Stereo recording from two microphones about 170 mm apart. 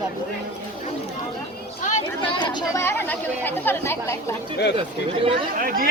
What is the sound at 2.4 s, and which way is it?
Speech, 25° left (ahead or behind).